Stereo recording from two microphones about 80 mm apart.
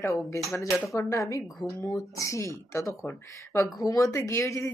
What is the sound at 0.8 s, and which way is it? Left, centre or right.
Speech, left.